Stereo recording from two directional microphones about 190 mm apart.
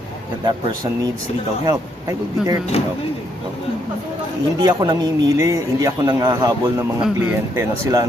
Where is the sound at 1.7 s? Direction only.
20° right (ahead or behind).